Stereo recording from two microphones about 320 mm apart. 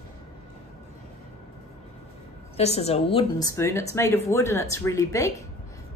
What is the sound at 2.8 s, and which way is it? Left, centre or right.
A woman's voice, centre.